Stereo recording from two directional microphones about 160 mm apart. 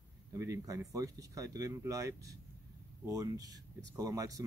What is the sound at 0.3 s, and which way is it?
Speech, 20° right (ahead or behind).